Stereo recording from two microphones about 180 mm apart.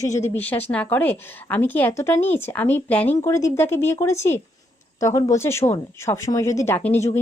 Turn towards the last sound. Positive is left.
turn(degrees=15)  # may be behind; listen again after turning